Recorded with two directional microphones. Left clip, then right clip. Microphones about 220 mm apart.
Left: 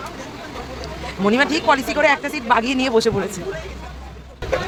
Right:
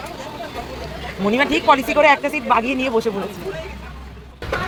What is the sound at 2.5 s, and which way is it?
Speech, 15° left (ahead or behind).